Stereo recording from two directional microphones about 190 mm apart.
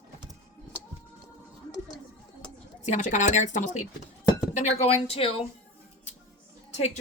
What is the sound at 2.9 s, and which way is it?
Speech, 40° left (ahead or behind).